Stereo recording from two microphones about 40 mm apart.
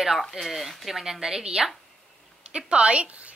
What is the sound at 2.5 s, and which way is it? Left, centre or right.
Speech, right.